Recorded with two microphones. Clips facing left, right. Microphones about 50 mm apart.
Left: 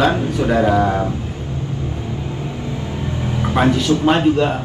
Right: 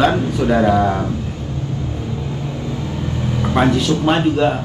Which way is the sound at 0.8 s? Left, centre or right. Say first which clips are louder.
Even; centre.